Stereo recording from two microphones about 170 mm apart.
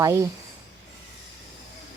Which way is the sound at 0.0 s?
20° right (ahead or behind).